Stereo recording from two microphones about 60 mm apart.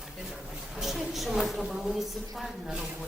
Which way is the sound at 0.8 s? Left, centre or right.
Centre.